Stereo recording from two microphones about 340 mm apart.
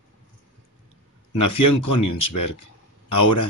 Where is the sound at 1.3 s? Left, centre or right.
Left.